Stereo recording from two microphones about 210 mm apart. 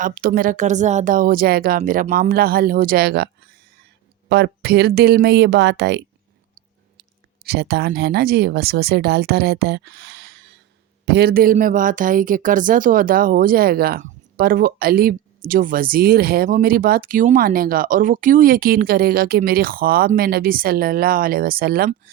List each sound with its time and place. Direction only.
0.0 s speech: 40° right (ahead or behind)
4.3 s speech: 55° right (ahead or behind)
7.4 s speech: 50° right (ahead or behind)